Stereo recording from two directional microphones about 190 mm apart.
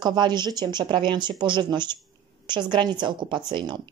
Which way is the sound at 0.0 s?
20° right (ahead or behind).